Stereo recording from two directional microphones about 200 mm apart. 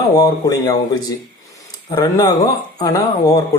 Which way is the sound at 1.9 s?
20° left (ahead or behind).